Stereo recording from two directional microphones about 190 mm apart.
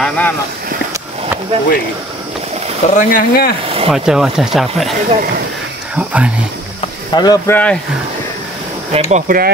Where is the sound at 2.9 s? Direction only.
45° left (ahead or behind).